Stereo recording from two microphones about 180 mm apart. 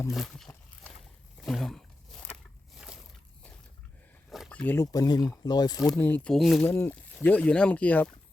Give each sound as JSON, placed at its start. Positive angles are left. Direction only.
{"t": 0.1, "sound": "a sound", "side_deg": 0}
{"t": 4.3, "sound": "speech", "side_deg": 0}
{"t": 5.8, "sound": "speech", "side_deg": 5}